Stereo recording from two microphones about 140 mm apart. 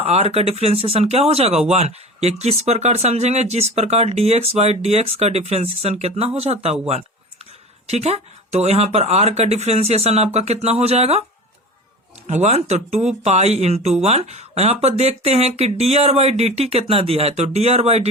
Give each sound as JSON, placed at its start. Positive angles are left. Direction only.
{"t": 0.1, "sound": "speech", "side_deg": -50}
{"t": 7.9, "sound": "speech", "side_deg": -50}
{"t": 12.3, "sound": "speech", "side_deg": -50}